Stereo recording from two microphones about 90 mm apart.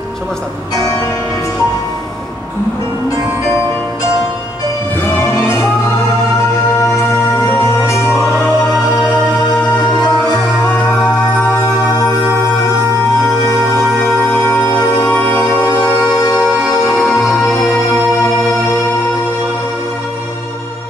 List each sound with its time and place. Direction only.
7.0 s music: 30° left (ahead or behind)
14.4 s music: 25° left (ahead or behind)
16.3 s music: 5° left (ahead or behind)